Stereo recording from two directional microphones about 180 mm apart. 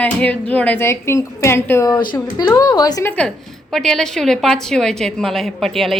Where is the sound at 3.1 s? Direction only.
5° left (ahead or behind).